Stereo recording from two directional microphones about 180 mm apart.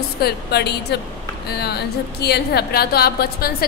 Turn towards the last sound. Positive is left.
turn(degrees=55)  # may be behind; listen again after turning